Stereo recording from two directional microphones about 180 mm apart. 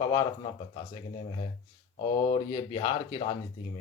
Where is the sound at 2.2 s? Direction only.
30° left (ahead or behind).